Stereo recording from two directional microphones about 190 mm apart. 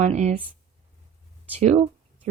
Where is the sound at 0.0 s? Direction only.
35° right (ahead or behind).